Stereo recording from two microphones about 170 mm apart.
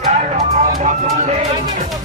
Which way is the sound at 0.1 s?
45° right (ahead or behind).